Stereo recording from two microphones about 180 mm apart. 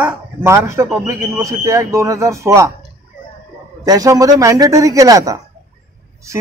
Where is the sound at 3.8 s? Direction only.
20° right (ahead or behind).